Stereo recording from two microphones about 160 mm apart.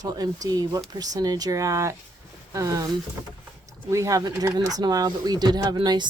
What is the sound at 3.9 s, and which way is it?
Speech, 20° right (ahead or behind).